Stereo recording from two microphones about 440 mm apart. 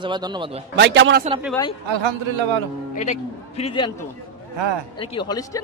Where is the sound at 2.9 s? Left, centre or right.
Centre.